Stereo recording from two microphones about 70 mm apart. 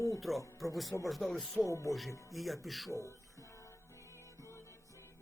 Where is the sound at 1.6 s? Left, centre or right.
Left.